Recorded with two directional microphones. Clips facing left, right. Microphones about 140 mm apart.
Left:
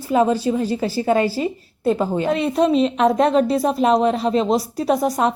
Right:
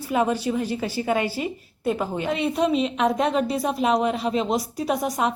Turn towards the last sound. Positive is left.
turn(degrees=35)  # may be behind; listen again after turning